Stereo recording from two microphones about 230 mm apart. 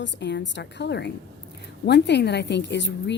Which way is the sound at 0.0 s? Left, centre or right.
Left.